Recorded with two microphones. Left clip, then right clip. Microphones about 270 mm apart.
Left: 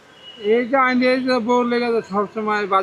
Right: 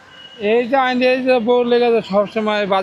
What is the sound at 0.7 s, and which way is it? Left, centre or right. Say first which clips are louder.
Speech: right 2 dB; centre.